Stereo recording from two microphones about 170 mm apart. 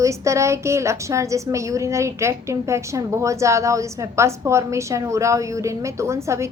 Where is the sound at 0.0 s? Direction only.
15° right (ahead or behind).